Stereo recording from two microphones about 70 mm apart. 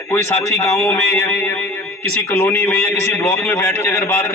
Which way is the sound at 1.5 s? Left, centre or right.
Left.